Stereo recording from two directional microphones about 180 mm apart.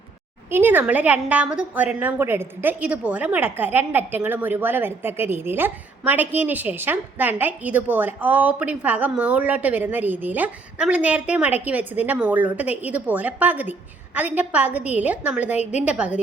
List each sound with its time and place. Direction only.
0.5 s a woman's voice: 10° right (ahead or behind)